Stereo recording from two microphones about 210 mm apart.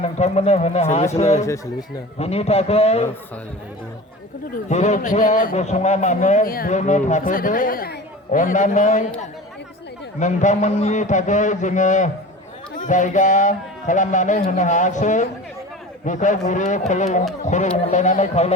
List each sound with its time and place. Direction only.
0.0 s a man's voice: 30° left (ahead or behind)
4.5 s a man's voice: 35° left (ahead or behind)
10.2 s a man's voice: 35° left (ahead or behind)